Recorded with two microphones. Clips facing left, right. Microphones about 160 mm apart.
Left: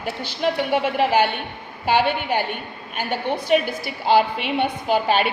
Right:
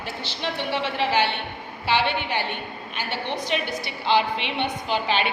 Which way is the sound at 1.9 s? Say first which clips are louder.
Left 4 dB; 50° left (ahead or behind).